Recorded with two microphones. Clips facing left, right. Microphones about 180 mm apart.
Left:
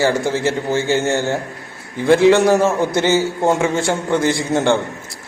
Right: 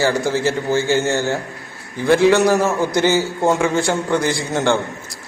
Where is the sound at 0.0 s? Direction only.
20° left (ahead or behind).